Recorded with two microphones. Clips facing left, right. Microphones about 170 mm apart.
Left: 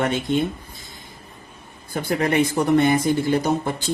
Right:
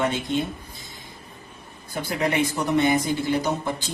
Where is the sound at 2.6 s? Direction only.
50° left (ahead or behind).